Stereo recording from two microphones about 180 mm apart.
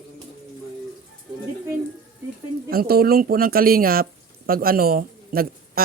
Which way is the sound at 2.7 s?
55° right (ahead or behind).